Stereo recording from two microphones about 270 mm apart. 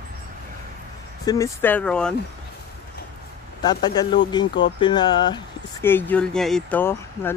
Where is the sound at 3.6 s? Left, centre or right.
Centre.